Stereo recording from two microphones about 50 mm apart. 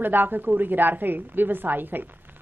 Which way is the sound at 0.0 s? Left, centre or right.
Right.